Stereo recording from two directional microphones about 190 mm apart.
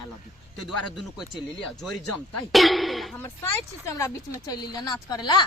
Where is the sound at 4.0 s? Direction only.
20° left (ahead or behind).